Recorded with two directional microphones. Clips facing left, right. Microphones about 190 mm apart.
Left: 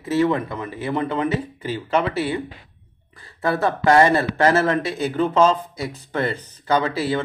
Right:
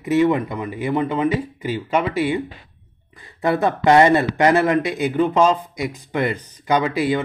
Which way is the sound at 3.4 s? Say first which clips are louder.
Right 2 dB; 20° right (ahead or behind).